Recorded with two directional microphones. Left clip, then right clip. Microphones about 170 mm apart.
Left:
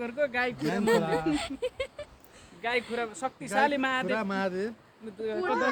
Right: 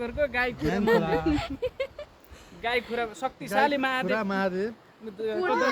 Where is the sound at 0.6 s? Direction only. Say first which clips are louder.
Right 2 dB; 15° left (ahead or behind).